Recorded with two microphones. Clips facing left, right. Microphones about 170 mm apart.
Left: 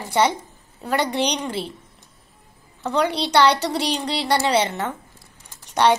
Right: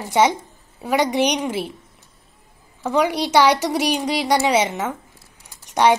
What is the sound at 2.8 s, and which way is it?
A woman's voice, 5° right (ahead or behind).